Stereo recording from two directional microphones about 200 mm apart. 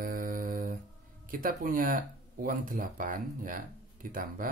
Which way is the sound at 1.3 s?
45° right (ahead or behind).